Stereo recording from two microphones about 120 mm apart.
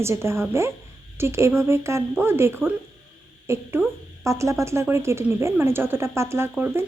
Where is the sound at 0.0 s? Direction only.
20° right (ahead or behind).